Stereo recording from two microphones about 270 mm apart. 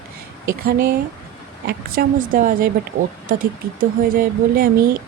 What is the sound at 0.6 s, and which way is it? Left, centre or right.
Speech, right.